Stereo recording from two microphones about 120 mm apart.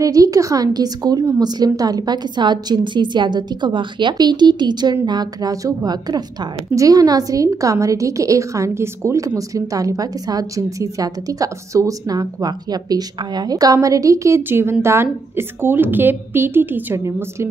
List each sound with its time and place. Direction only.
0.0 s a woman's voice: 30° right (ahead or behind)